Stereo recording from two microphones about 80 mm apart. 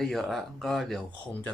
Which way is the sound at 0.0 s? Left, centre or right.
Centre.